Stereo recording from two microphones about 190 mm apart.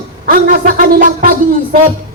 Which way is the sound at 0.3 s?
45° right (ahead or behind).